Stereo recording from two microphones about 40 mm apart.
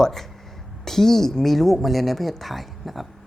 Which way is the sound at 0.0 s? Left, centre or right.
Centre.